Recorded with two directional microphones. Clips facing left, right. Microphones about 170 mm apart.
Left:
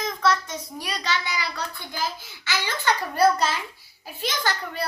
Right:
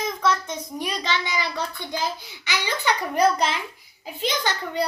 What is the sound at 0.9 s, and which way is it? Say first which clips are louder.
A child's voice: right 1 dB; 20° right (ahead or behind).